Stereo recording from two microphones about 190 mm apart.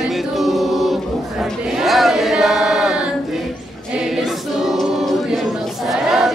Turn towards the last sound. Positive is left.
turn(degrees=0)  # may be behind; listen again after turning